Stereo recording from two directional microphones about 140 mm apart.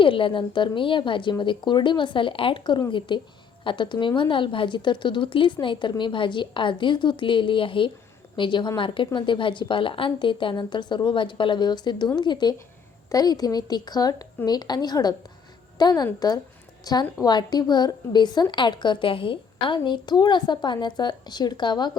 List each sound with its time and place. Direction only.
0.0 s a woman's voice: 40° left (ahead or behind)